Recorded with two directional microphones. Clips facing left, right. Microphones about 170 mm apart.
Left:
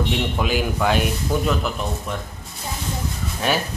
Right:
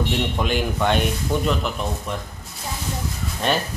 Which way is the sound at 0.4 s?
5° left (ahead or behind).